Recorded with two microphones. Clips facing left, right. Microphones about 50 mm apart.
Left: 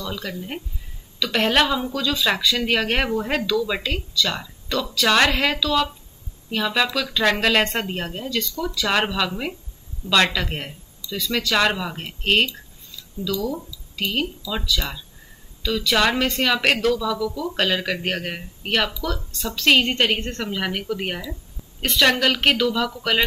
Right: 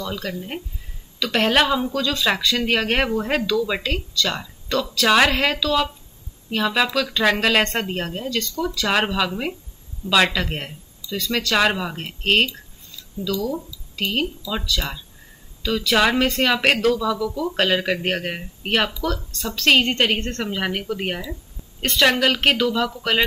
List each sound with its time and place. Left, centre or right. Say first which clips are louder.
1.2 s speech: right 1 dB; centre
16.9 s speech: right 1 dB; centre
19.3 s speech: even; centre
20.4 s speech: left 1 dB; centre